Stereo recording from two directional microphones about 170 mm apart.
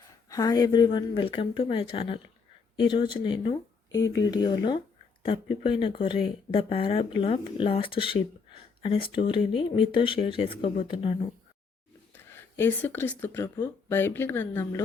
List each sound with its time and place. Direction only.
0.3 s speech: 20° left (ahead or behind)
12.1 s speech: 10° left (ahead or behind)